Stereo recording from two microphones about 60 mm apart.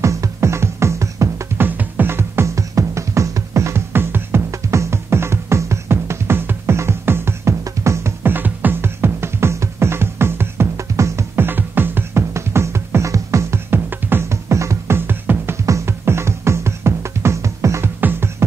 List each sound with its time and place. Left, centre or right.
0.0 s music: right
1.6 s music: right
2.4 s music: right
4.5 s music: right
8.2 s music: right
10.8 s music: right
11.3 s music: right
13.7 s music: right
14.3 s music: right
15.0 s music: right
15.6 s music: right